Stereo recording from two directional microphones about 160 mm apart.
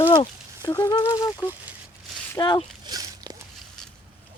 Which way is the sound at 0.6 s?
15° left (ahead or behind).